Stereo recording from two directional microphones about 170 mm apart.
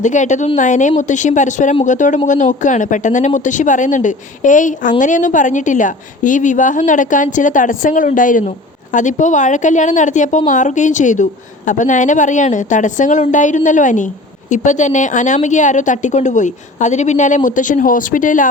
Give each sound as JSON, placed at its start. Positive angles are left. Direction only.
{"t": 0.0, "sound": "speech", "side_deg": 45}